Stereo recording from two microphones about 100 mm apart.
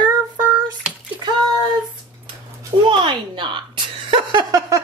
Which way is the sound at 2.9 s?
55° right (ahead or behind).